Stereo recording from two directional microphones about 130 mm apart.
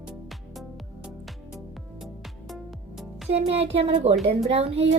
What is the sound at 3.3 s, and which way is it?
A woman's voice, 55° right (ahead or behind).